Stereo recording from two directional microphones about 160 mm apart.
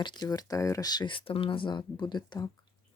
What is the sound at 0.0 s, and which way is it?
Speech, 25° left (ahead or behind).